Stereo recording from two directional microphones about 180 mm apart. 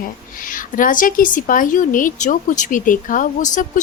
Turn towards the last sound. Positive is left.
turn(degrees=45)  # may be behind; listen again after turning